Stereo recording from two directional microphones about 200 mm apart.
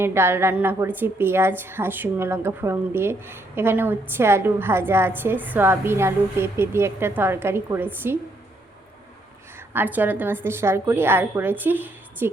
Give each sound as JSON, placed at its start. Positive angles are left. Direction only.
{"t": 0.0, "sound": "a woman's voice", "side_deg": -10}
{"t": 9.6, "sound": "a woman's voice", "side_deg": -10}